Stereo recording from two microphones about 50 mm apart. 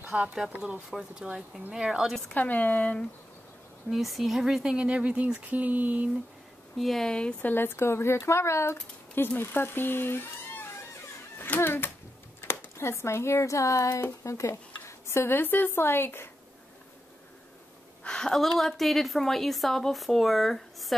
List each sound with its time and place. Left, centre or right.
0.1 s speech: right
2.3 s speech: left
3.9 s speech: centre
4.7 s speech: right
6.8 s speech: centre
7.1 s speech: centre
7.4 s a child's voice: left
14.2 s a sound: left
15.3 s a woman's voice: left
18.0 s a sound: centre
18.3 s speech: centre